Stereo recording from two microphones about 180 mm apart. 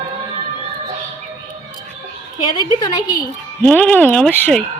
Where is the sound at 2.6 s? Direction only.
25° left (ahead or behind).